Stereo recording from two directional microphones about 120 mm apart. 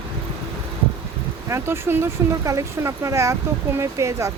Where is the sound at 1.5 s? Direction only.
20° right (ahead or behind).